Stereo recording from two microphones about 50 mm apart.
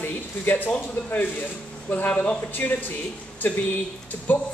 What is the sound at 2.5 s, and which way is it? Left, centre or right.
Speech, left.